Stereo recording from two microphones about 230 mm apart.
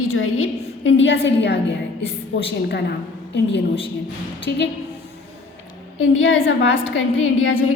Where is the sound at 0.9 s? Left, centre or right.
Left.